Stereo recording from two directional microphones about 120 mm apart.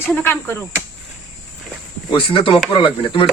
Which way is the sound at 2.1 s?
45° left (ahead or behind).